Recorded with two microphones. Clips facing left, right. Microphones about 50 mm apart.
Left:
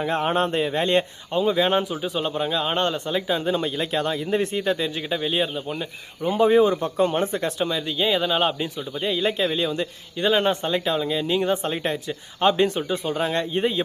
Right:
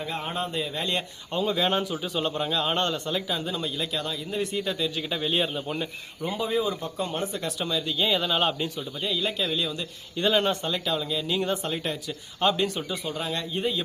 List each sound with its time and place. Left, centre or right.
0.0 s speech: left
1.3 s a man's voice: centre
3.2 s speech: left
5.0 s a man's voice: centre
6.2 s speech: left
7.6 s a man's voice: left
9.0 s speech: left
10.2 s speech: centre
10.6 s speech: left